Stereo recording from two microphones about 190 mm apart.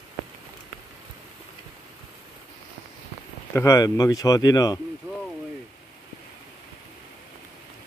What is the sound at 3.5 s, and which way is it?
Speech, 15° left (ahead or behind).